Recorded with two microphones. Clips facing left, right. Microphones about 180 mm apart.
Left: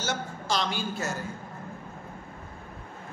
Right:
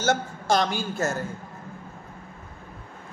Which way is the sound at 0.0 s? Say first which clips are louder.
Right 7 dB; 50° right (ahead or behind).